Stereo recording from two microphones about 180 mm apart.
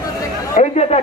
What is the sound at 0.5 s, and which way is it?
Speech, 40° left (ahead or behind).